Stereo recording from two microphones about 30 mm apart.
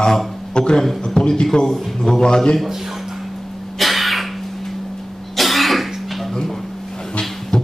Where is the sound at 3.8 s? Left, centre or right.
Centre.